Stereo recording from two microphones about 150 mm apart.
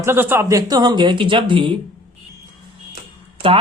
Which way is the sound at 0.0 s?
15° right (ahead or behind).